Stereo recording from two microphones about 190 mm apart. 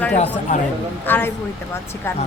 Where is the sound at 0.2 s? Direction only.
40° left (ahead or behind).